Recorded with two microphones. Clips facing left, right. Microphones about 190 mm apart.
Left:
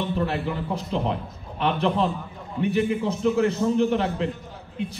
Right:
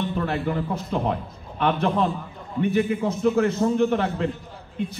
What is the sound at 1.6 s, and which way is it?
Speech, 50° right (ahead or behind).